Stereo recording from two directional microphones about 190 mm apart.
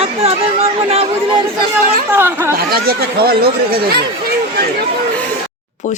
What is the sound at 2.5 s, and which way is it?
Speech, 55° right (ahead or behind).